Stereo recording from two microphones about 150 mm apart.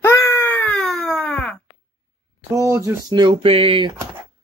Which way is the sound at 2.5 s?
20° right (ahead or behind).